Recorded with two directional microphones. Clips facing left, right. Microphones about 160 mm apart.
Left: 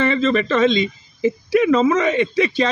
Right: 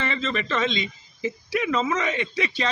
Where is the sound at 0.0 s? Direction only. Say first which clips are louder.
Left 10 dB; 45° left (ahead or behind).